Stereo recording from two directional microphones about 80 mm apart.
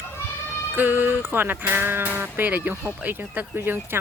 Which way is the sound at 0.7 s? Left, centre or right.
Right.